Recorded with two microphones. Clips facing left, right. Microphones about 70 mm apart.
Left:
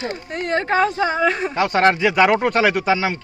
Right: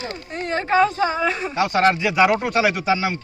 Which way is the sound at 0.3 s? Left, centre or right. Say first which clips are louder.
Even; left.